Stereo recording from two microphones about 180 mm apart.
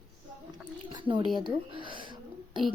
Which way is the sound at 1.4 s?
25° right (ahead or behind).